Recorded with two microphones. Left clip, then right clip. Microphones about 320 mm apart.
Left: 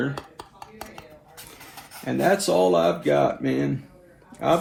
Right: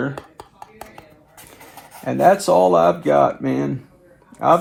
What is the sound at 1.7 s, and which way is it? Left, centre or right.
A man's voice, centre.